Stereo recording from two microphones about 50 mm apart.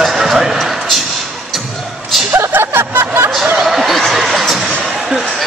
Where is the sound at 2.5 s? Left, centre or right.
Right.